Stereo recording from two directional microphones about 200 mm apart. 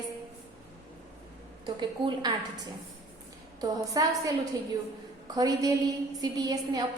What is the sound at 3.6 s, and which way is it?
A woman's voice, 20° right (ahead or behind).